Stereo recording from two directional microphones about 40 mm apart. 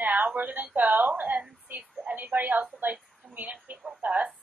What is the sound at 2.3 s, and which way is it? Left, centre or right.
Speech, right.